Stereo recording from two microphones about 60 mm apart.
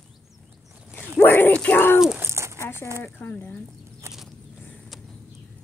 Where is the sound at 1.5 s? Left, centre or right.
Left.